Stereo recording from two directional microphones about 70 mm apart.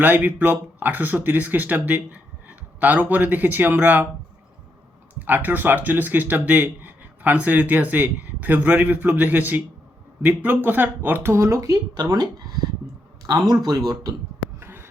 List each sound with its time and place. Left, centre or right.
0.0 s speech: right
5.2 s speech: right
13.2 s speech: right
14.6 s a sound: right